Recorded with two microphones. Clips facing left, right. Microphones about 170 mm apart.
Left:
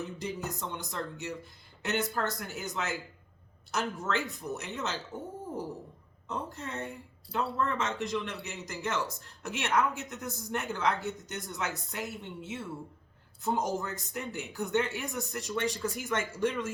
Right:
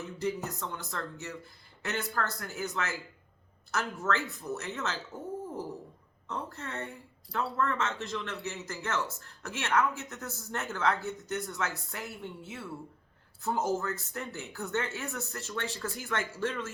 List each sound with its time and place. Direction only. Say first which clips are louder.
0.0 s a sound: right 2 dB; 20° left (ahead or behind)
1.8 s speech: left 2 dB; 20° left (ahead or behind)
4.0 s speech: right 1 dB; 20° left (ahead or behind)
6.2 s speech: left 1 dB; 20° left (ahead or behind)